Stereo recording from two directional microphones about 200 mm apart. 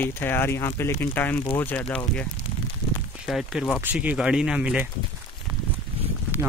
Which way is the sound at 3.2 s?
5° right (ahead or behind).